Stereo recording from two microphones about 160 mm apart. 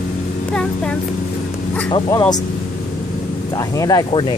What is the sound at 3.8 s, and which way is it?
Speech, 25° left (ahead or behind).